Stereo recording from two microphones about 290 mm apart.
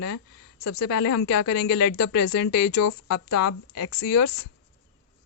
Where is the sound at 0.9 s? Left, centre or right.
Left.